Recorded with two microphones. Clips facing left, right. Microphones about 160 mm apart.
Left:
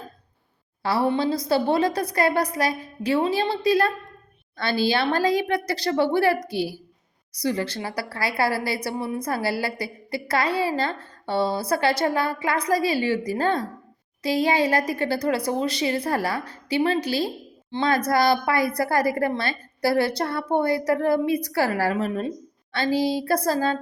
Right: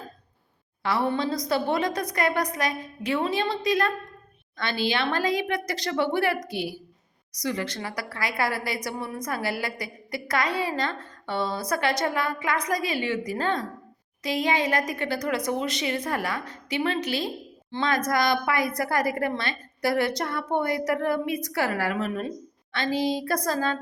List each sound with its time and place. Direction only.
0.8 s a woman's voice: 30° left (ahead or behind)